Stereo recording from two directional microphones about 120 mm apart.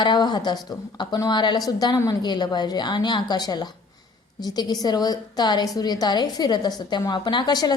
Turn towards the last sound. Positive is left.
turn(degrees=35)  # may be behind; listen again after turning